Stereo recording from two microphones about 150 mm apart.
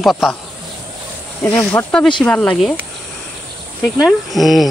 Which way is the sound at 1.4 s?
15° left (ahead or behind).